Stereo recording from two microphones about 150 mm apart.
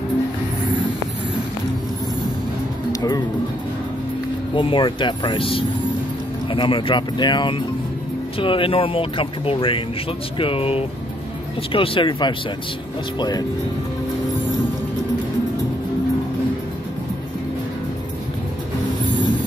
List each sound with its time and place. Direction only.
2.9 s music: 25° left (ahead or behind)
4.6 s speech: 35° left (ahead or behind)